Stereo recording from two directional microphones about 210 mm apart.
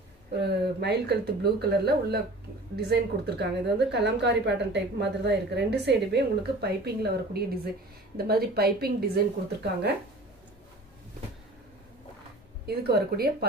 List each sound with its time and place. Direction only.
0.4 s a woman's voice: 50° right (ahead or behind)
12.6 s a woman's voice: 50° right (ahead or behind)